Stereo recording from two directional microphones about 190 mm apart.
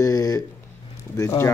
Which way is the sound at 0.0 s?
15° left (ahead or behind).